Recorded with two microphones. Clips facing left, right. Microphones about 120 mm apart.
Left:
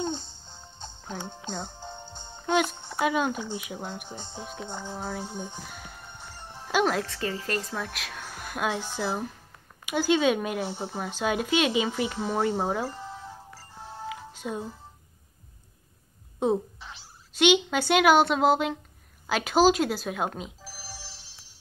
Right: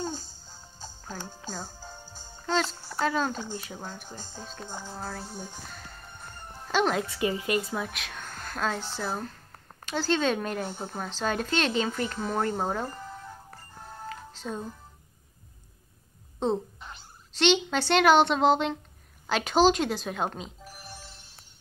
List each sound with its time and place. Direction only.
0.0 s music: 5° right (ahead or behind)
1.1 s speech: 20° left (ahead or behind)
1.7 s music: 25° left (ahead or behind)
3.0 s speech: 15° left (ahead or behind)
5.7 s music: 5° left (ahead or behind)
6.1 s music: 90° left
6.7 s speech: 5° left (ahead or behind)
7.2 s a woman's voice: 15° right (ahead or behind); by 12.9 s 5° left (ahead or behind)
14.0 s music: 10° left (ahead or behind)
16.4 s speech: 10° left (ahead or behind)
20.8 s telephone bell ringing: 90° left